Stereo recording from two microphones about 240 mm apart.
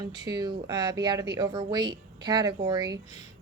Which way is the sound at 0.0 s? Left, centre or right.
Centre.